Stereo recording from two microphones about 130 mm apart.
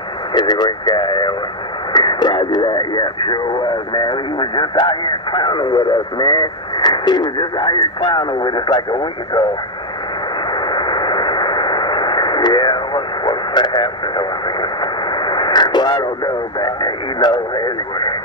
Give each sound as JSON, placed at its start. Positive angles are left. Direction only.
{"t": 0.3, "sound": "speech", "side_deg": 35}
{"t": 10.5, "sound": "radio", "side_deg": 35}
{"t": 16.5, "sound": "speech", "side_deg": 35}